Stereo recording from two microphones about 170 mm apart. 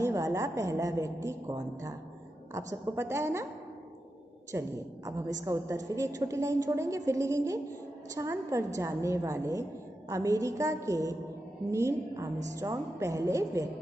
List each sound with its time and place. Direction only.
0.0 s a woman's voice: 20° right (ahead or behind)
4.5 s a woman's voice: 15° right (ahead or behind)